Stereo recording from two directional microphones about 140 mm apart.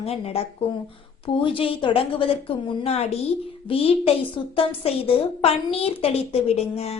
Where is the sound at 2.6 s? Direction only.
50° left (ahead or behind).